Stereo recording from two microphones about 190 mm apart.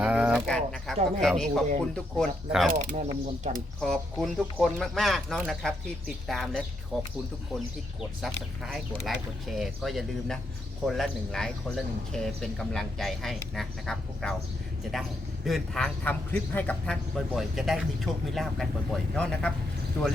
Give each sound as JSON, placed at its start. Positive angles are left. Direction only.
{"t": 0.0, "sound": "a sound", "side_deg": -5}
{"t": 1.2, "sound": "a man's voice", "side_deg": 0}
{"t": 2.7, "sound": "speech", "side_deg": -40}
{"t": 3.8, "sound": "a man's voice", "side_deg": 0}
{"t": 8.6, "sound": "a man's voice", "side_deg": 0}
{"t": 15.4, "sound": "a man's voice", "side_deg": 0}